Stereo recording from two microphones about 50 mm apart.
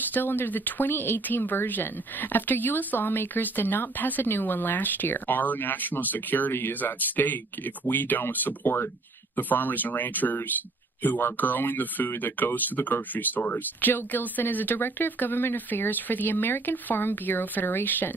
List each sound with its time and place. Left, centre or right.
0.1 s speech: left